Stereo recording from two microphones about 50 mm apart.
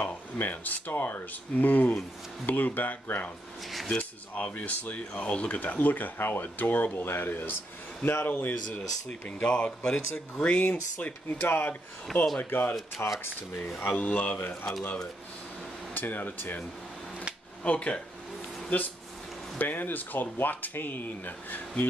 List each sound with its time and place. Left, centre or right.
0.0 s speech: left
3.9 s speech: left
9.4 s speech: left
11.4 s speech: left
13.7 s speech: left
15.9 s speech: left
17.6 s speech: left
18.7 s speech: left